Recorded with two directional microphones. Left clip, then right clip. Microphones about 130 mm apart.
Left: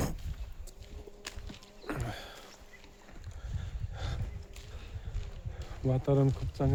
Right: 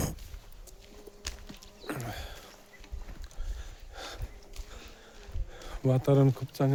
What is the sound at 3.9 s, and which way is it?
Horse, 30° right (ahead or behind).